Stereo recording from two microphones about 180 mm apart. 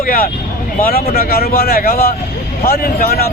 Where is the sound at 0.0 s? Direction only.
55° left (ahead or behind).